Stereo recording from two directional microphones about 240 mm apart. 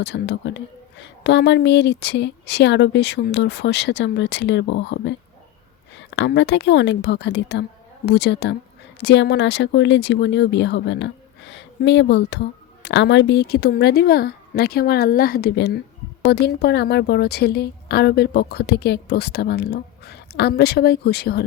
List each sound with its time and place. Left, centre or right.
0.0 s a woman's voice: left